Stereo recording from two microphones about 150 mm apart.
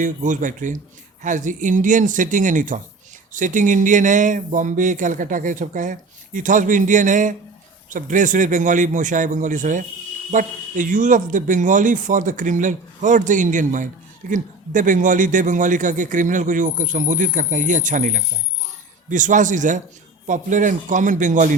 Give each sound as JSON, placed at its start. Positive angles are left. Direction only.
{"t": 0.0, "sound": "speech", "side_deg": -60}